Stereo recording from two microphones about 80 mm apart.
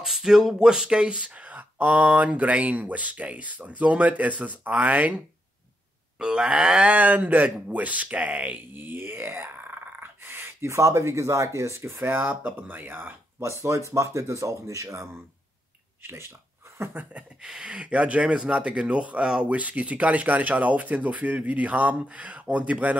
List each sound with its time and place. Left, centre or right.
0.0 s speech: centre; by 13.2 s right
13.4 s speech: right
17.4 s speech: centre